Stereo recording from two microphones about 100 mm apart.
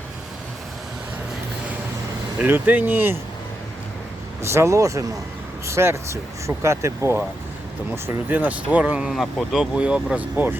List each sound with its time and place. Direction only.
2.4 s speech: 15° right (ahead or behind)
4.4 s speech: 30° right (ahead or behind)
8.0 s speech: 15° right (ahead or behind)